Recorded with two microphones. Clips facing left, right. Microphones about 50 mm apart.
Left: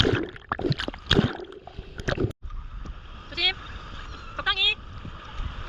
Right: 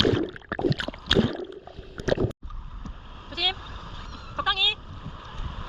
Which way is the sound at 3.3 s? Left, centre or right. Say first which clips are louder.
Left 1 dB; left.